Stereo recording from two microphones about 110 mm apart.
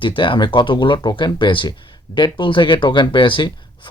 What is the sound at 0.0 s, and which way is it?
Speech, 50° left (ahead or behind).